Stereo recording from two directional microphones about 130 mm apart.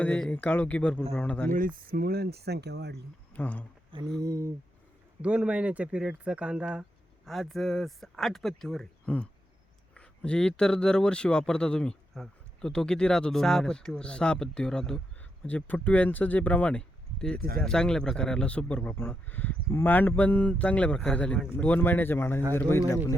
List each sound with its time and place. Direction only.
0.0 s speech: 10° left (ahead or behind)
1.5 s speech: 90° right
3.3 s speech: 10° left (ahead or behind)
4.2 s a sound: 25° right (ahead or behind)
5.2 s speech: 10° right (ahead or behind); by 22.4 s 15° left (ahead or behind)